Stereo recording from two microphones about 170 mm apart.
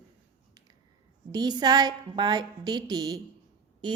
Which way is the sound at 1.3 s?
25° right (ahead or behind).